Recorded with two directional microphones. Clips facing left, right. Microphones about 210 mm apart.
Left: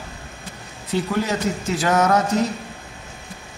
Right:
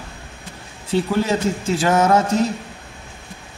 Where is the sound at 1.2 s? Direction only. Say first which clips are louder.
Right 3 dB; 30° right (ahead or behind).